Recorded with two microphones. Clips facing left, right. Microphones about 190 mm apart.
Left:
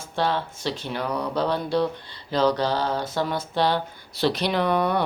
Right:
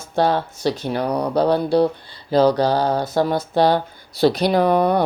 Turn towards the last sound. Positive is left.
turn(degrees=-40)  # may be behind; listen again after turning